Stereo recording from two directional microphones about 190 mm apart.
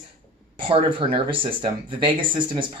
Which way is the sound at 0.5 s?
30° right (ahead or behind).